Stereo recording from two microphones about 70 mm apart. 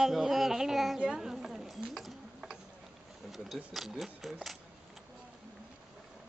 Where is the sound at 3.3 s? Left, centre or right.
Centre.